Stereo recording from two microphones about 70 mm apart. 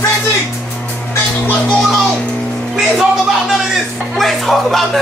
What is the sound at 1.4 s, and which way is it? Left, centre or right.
Music, left.